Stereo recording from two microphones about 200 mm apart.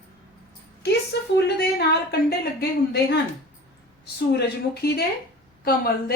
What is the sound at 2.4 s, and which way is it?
Speech, 50° left (ahead or behind).